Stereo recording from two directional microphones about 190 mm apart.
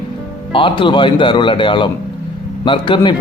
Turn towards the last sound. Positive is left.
turn(degrees=25)  # may be behind; listen again after turning